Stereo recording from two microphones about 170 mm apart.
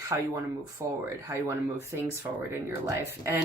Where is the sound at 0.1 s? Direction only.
20° right (ahead or behind).